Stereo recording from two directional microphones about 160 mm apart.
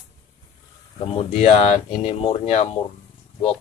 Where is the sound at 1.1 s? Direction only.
40° left (ahead or behind).